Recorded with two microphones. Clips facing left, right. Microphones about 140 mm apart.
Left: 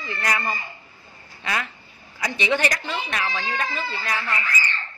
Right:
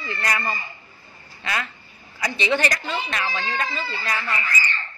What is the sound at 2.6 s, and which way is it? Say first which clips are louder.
Speech: right 1 dB; 15° left (ahead or behind).